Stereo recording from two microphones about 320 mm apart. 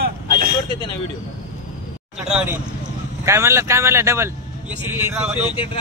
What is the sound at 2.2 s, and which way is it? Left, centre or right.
Speech, centre.